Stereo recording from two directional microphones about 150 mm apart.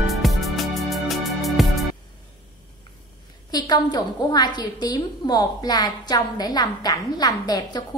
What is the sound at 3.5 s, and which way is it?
A woman's voice, 25° left (ahead or behind).